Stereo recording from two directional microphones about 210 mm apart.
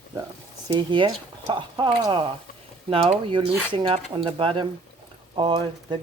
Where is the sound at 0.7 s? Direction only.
20° right (ahead or behind).